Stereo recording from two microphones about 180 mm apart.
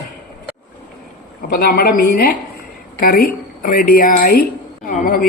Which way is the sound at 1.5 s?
55° left (ahead or behind).